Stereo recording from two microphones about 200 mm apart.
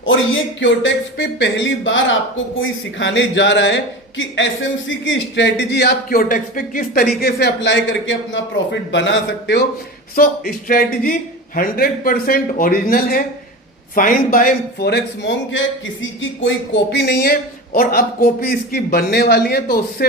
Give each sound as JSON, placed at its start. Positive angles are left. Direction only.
{"t": 0.0, "sound": "a man's voice", "side_deg": 75}
{"t": 10.2, "sound": "a man's voice", "side_deg": 45}